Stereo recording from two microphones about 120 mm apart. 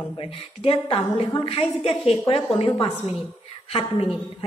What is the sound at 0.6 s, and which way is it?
A woman's voice, 50° left (ahead or behind).